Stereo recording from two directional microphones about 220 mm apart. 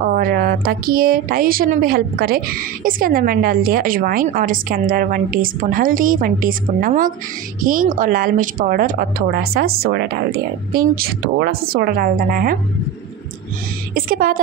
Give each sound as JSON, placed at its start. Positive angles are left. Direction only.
{"t": 0.1, "sound": "speech", "side_deg": -40}
{"t": 13.9, "sound": "speech", "side_deg": -40}